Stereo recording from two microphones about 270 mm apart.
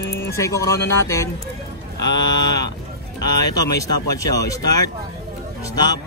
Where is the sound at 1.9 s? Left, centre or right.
Left.